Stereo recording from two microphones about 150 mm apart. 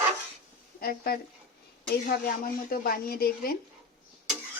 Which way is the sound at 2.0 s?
75° left (ahead or behind).